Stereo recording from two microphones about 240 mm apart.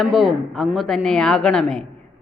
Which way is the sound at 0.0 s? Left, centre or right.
Centre.